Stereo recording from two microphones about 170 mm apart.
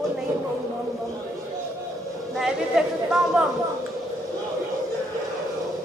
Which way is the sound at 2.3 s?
5° right (ahead or behind).